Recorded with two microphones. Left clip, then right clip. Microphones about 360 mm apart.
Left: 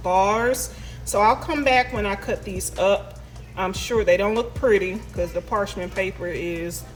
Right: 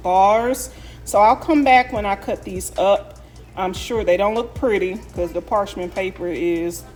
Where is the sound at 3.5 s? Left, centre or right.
Right.